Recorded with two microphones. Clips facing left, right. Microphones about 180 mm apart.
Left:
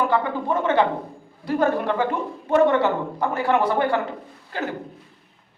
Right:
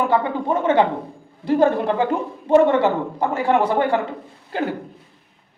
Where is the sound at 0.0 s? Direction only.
20° right (ahead or behind).